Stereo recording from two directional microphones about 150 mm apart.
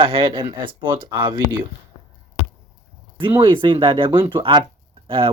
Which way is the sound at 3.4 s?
35° right (ahead or behind).